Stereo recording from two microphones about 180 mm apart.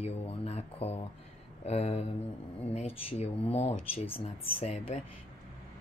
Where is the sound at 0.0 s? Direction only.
35° left (ahead or behind).